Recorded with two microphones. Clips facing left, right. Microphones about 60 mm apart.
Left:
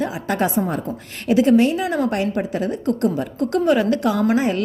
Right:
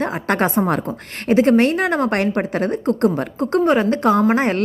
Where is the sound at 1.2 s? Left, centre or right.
Right.